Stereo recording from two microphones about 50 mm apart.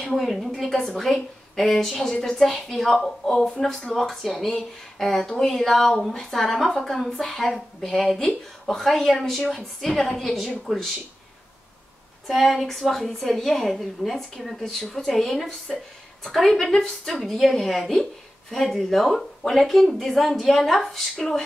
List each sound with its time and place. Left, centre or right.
0.0 s a woman's voice: centre
12.3 s a woman's voice: centre